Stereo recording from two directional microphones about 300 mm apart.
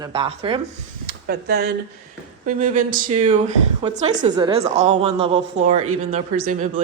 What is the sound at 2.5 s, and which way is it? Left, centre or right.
A woman's voice, right.